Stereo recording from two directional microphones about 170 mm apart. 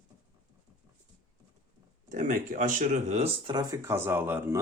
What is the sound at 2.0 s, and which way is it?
Speech, 50° right (ahead or behind).